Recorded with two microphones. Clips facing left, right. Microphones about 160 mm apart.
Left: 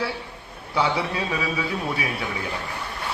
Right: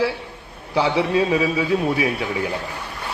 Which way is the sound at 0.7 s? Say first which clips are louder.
Right 5 dB; 30° right (ahead or behind).